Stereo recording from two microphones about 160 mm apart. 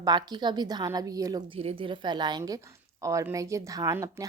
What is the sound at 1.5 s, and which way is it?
A woman's voice, 35° right (ahead or behind).